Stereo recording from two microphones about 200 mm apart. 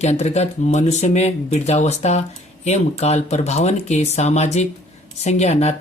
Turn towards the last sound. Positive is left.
turn(degrees=35)  # may be behind; listen again after turning